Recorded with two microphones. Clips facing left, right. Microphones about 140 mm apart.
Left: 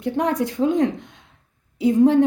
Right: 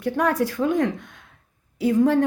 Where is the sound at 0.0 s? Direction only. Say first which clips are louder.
Even; 20° left (ahead or behind).